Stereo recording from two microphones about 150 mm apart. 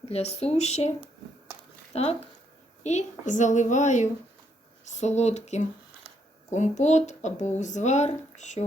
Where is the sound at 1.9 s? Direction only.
45° left (ahead or behind).